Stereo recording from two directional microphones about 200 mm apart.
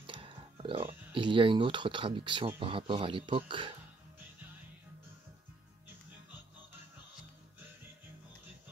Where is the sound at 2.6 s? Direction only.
25° right (ahead or behind).